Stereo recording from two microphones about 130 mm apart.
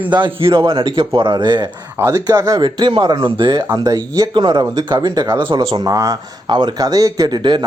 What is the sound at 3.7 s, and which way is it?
Speech, 25° right (ahead or behind).